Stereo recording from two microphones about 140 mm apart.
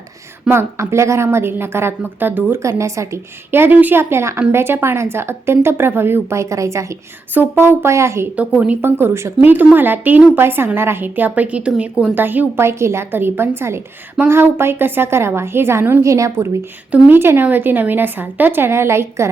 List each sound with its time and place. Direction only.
0.4 s speech: 20° right (ahead or behind)